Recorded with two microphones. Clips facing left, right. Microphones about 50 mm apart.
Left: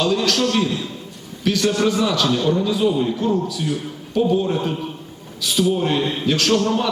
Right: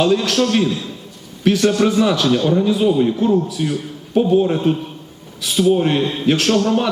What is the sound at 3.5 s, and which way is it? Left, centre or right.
A man's voice, right.